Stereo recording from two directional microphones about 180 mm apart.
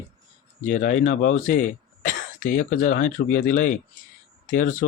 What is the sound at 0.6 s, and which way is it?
Speech, 45° left (ahead or behind).